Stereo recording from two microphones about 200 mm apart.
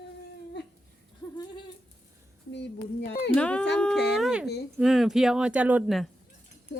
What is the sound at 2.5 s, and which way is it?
Speech, 60° left (ahead or behind).